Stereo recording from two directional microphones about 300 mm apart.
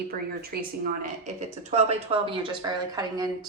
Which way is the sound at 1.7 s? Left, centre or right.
Centre.